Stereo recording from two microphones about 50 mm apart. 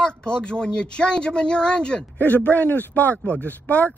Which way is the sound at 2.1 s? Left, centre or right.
Left.